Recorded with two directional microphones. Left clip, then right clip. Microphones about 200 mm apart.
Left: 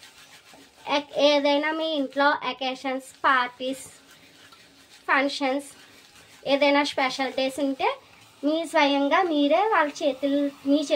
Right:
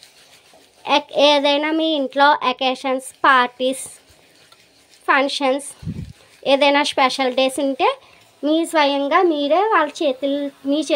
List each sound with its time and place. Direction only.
0.8 s a woman's voice: 40° right (ahead or behind)
5.0 s a woman's voice: 40° right (ahead or behind)